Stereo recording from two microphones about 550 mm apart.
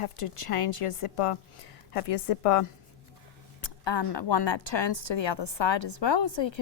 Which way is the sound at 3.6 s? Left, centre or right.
Left.